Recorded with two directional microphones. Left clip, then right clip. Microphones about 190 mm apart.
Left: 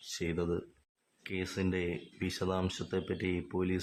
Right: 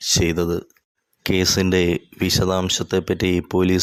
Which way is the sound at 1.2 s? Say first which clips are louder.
Right 17 dB; 45° right (ahead or behind).